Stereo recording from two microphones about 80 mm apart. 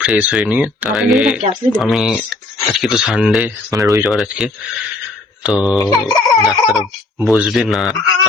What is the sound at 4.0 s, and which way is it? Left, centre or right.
Speech, centre.